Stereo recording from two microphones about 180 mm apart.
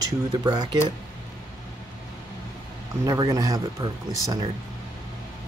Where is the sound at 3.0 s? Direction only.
20° right (ahead or behind).